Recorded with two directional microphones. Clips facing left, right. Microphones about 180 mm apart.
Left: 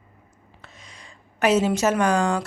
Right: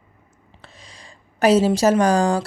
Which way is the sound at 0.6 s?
30° right (ahead or behind).